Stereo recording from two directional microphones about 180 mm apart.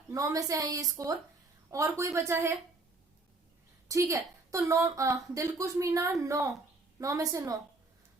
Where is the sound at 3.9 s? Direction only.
15° right (ahead or behind).